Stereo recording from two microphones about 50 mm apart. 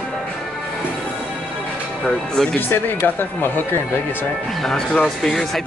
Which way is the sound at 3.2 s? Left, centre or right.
Left.